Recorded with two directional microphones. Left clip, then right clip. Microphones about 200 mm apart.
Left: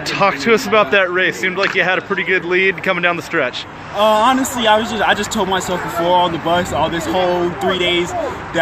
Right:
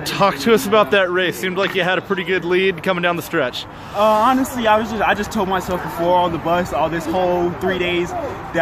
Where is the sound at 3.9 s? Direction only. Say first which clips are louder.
Left 2 dB; 5° left (ahead or behind).